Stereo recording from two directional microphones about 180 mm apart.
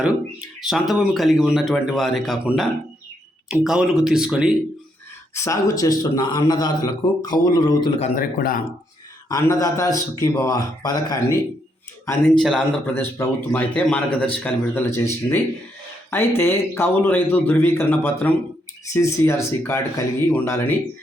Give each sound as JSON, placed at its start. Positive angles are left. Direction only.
{"t": 0.7, "sound": "speech", "side_deg": 0}
{"t": 5.3, "sound": "a man's voice", "side_deg": 15}
{"t": 8.2, "sound": "speech", "side_deg": 50}
{"t": 9.3, "sound": "a man's voice", "side_deg": 20}
{"t": 12.4, "sound": "speech", "side_deg": 0}
{"t": 12.9, "sound": "a man's voice", "side_deg": 10}
{"t": 16.4, "sound": "a man's voice", "side_deg": 15}